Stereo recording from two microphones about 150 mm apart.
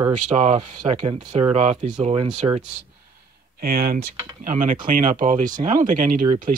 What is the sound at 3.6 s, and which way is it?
Speech, 80° right.